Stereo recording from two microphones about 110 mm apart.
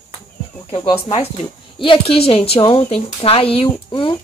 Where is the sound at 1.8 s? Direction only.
55° left (ahead or behind).